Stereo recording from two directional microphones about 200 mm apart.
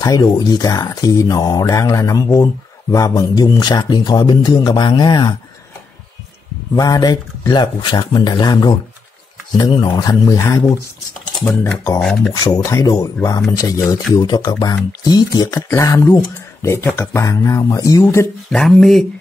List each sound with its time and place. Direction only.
0.0 s speech: 20° left (ahead or behind)
6.7 s speech: 20° left (ahead or behind)
12.0 s speech: centre (ahead or behind)
12.4 s speech: 20° left (ahead or behind)
18.5 s speech: centre (ahead or behind)